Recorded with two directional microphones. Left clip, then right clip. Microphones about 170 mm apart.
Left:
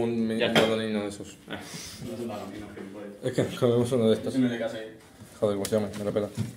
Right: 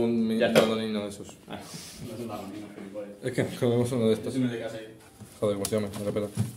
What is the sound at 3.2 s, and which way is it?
Speech, 5° right (ahead or behind).